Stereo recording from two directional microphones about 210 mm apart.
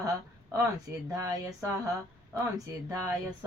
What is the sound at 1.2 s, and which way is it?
Speech, 15° right (ahead or behind).